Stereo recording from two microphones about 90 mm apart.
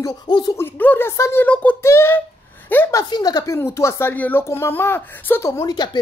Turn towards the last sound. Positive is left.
turn(degrees=50)  # may be behind; listen again after turning